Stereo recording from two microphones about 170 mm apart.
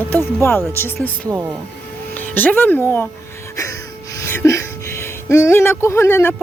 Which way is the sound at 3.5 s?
20° left (ahead or behind).